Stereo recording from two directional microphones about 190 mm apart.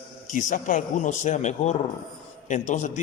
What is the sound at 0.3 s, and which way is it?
A man's voice, 40° left (ahead or behind).